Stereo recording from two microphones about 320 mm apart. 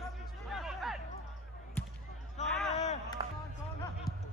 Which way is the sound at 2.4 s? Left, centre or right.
Centre.